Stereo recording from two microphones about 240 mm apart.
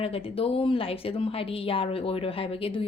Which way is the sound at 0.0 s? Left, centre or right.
Left.